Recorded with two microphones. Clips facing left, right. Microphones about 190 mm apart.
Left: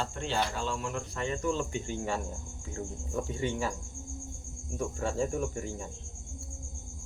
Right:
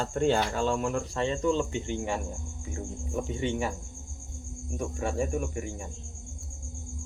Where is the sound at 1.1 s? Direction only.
30° right (ahead or behind).